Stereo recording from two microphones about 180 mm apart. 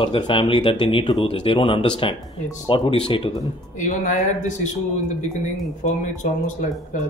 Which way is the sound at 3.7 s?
45° left (ahead or behind).